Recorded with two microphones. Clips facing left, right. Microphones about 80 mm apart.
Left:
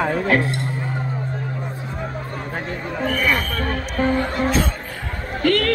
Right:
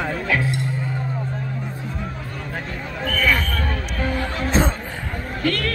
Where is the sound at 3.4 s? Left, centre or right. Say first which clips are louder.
Left 2 dB; left.